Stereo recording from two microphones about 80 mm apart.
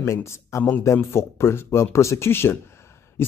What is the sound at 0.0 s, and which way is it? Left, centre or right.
Speech, left.